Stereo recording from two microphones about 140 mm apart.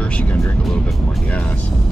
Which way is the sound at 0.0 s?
10° left (ahead or behind).